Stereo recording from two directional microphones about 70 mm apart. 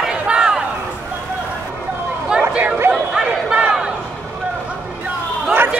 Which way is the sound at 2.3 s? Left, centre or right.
Right.